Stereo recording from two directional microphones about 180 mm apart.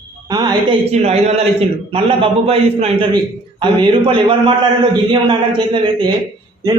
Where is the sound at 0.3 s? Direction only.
25° right (ahead or behind).